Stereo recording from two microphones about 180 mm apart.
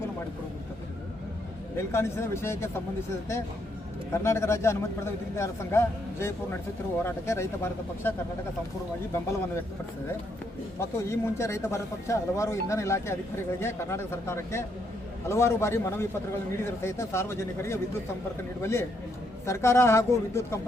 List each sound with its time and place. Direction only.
1.7 s speech: 15° left (ahead or behind)
10.8 s speech: 15° left (ahead or behind)